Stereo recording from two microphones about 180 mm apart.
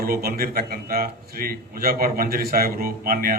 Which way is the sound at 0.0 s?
55° right (ahead or behind).